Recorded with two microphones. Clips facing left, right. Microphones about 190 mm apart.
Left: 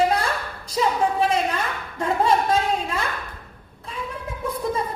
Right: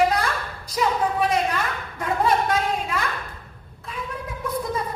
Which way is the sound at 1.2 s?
25° left (ahead or behind).